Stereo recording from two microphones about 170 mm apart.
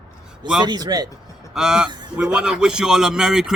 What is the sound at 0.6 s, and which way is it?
Speech, 25° right (ahead or behind).